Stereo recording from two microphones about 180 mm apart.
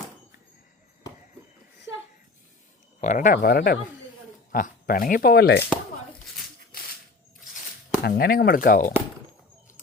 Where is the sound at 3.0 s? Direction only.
45° left (ahead or behind); by 5.6 s 60° left (ahead or behind).